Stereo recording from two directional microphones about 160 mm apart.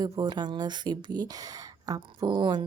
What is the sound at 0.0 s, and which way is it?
Speech, 25° right (ahead or behind).